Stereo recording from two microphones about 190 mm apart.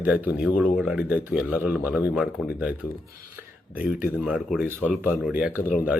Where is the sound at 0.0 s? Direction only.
10° right (ahead or behind).